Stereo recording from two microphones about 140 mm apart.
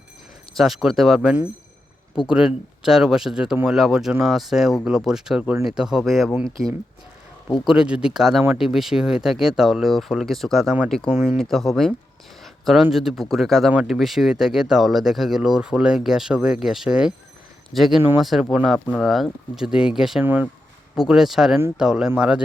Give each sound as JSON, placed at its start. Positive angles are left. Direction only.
{"t": 0.5, "sound": "speech", "side_deg": 0}
{"t": 7.6, "sound": "speech", "side_deg": -5}
{"t": 20.2, "sound": "speech", "side_deg": -15}
{"t": 20.9, "sound": "speech", "side_deg": -5}